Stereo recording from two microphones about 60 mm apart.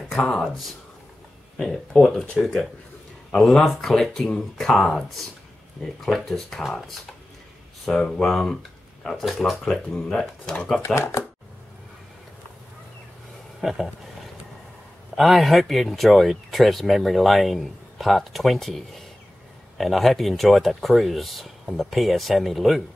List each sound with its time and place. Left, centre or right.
1.6 s speech: centre
7.9 s speech: centre
11.0 s speech: left
13.6 s a sound: centre
15.1 s speech: centre